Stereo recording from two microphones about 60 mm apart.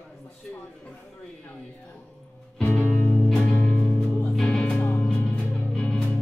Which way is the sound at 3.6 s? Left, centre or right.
Centre.